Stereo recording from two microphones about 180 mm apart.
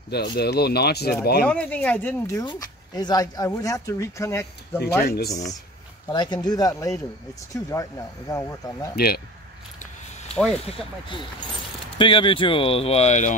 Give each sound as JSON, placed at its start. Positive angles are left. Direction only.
{"t": 0.1, "sound": "speech", "side_deg": 65}
{"t": 1.4, "sound": "speech", "side_deg": 5}
{"t": 4.8, "sound": "speech", "side_deg": 60}
{"t": 6.0, "sound": "speech", "side_deg": 25}
{"t": 8.3, "sound": "speech", "side_deg": 15}
{"t": 8.9, "sound": "speech", "side_deg": 60}
{"t": 10.2, "sound": "a sound", "side_deg": 5}
{"t": 10.7, "sound": "speech", "side_deg": 25}